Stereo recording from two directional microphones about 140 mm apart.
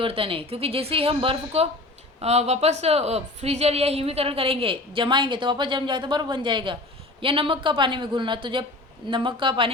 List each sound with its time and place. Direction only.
0.0 s a woman's voice: 40° right (ahead or behind)